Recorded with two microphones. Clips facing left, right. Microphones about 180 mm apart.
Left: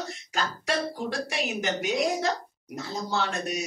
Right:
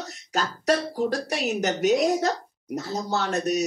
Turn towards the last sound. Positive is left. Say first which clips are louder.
# right 5 dB
turn(degrees=-40)  # may be behind; listen again after turning